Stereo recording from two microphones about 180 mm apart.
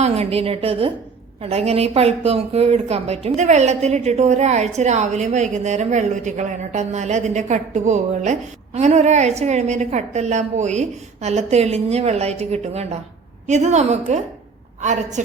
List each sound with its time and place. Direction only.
0.0 s a woman's voice: 35° right (ahead or behind)